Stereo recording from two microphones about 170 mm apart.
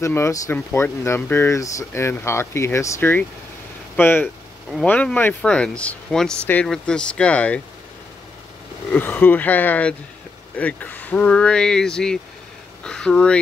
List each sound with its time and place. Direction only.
0.0 s speech: 15° left (ahead or behind)
8.9 s speech: 10° left (ahead or behind)